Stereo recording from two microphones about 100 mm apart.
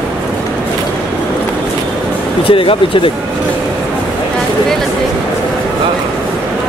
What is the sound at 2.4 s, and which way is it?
Speech, 65° left (ahead or behind).